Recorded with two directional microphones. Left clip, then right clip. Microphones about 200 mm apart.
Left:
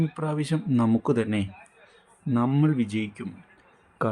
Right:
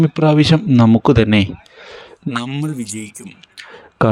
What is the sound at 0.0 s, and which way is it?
Speech, 40° right (ahead or behind).